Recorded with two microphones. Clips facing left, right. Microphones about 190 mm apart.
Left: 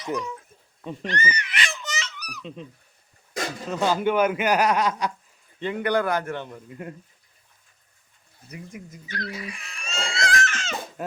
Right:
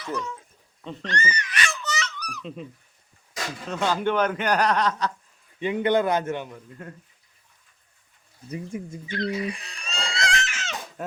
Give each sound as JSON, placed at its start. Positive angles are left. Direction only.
{"t": 0.0, "sound": "a man's voice", "side_deg": 15}
{"t": 0.9, "sound": "babbling", "side_deg": 15}
{"t": 3.7, "sound": "a man's voice", "side_deg": 10}
{"t": 5.5, "sound": "a man's voice", "side_deg": -20}
{"t": 6.8, "sound": "a man's voice", "side_deg": 15}
{"t": 8.4, "sound": "speech", "side_deg": -30}
{"t": 10.4, "sound": "goat", "side_deg": -5}